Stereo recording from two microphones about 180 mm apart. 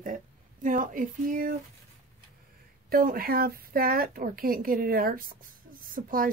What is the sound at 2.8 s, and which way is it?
Speech, 55° right (ahead or behind).